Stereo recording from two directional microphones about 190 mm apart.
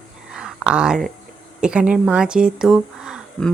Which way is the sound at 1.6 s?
5° right (ahead or behind).